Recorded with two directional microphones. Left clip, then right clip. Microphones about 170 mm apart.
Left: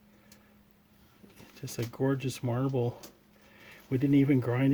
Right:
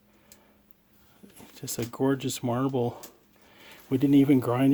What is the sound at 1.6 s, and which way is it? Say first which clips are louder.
Speech: right 4 dB; 25° right (ahead or behind).